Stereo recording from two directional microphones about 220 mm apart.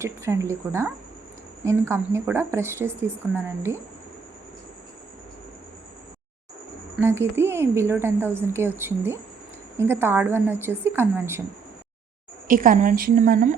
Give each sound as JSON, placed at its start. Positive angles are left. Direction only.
{"t": 0.0, "sound": "a woman's voice", "side_deg": -10}
{"t": 6.9, "sound": "a woman's voice", "side_deg": -10}
{"t": 12.5, "sound": "a woman's voice", "side_deg": -35}